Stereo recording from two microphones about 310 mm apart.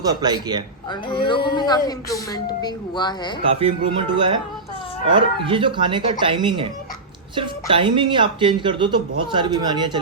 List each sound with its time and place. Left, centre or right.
0.2 s speech: centre
0.9 s speech: centre
3.4 s speech: centre